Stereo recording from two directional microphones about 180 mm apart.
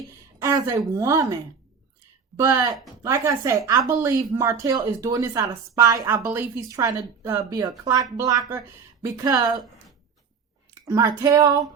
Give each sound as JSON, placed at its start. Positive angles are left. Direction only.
{"t": 0.3, "sound": "a woman's voice", "side_deg": -15}
{"t": 10.8, "sound": "speech", "side_deg": -15}